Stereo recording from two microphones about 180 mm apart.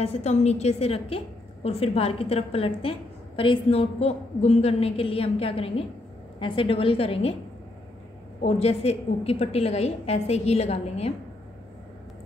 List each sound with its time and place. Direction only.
0.0 s a woman's voice: 35° left (ahead or behind)
8.4 s a woman's voice: 35° left (ahead or behind)